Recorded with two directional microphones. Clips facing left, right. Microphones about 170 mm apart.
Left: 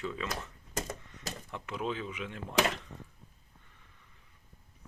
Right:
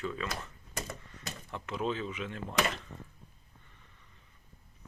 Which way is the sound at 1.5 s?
10° left (ahead or behind).